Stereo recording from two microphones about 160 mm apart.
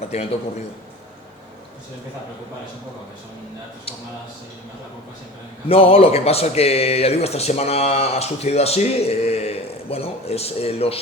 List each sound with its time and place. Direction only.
0.1 s speech: 40° left (ahead or behind)
5.6 s speech: 40° left (ahead or behind)